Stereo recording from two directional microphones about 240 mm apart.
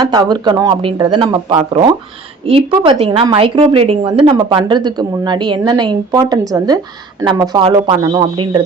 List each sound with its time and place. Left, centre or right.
0.1 s a woman's voice: centre